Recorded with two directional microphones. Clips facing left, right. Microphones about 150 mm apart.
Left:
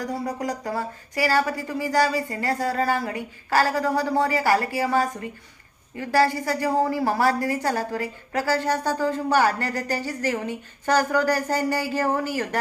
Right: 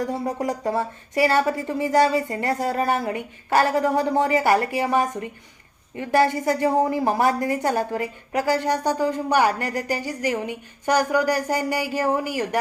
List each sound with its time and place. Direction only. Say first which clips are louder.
0.0 s a woman's voice: right 3 dB; 25° right (ahead or behind)